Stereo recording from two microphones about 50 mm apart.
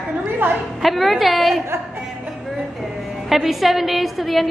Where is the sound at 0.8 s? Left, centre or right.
Centre.